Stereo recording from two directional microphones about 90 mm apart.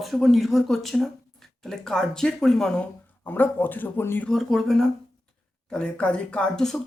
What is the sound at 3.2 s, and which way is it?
Speech, 20° left (ahead or behind).